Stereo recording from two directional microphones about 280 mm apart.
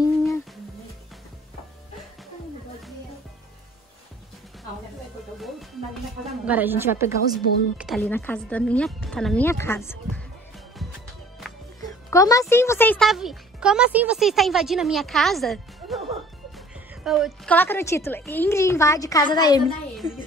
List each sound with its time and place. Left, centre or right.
0.0 s music: centre
6.2 s a woman's voice: centre
11.8 s a woman's voice: centre